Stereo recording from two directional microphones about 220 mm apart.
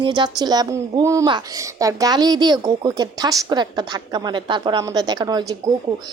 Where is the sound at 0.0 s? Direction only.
20° right (ahead or behind).